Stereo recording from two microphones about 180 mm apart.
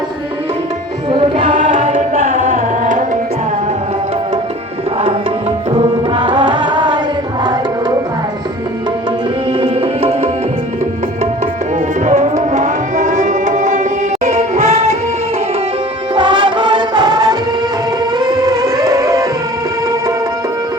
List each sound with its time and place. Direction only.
1.4 s music: 45° right (ahead or behind)
6.1 s music: 25° right (ahead or behind)
9.5 s music: 30° right (ahead or behind)
12.0 s music: 40° right (ahead or behind)
16.1 s music: 25° right (ahead or behind)